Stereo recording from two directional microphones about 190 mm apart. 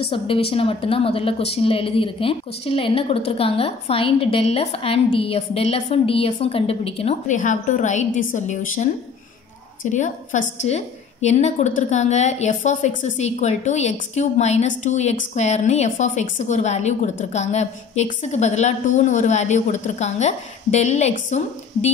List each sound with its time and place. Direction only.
0.0 s a woman's voice: 30° left (ahead or behind)
9.8 s a woman's voice: 40° left (ahead or behind)